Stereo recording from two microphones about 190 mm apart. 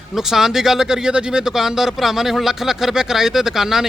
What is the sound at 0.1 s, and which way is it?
Speech, centre (ahead or behind).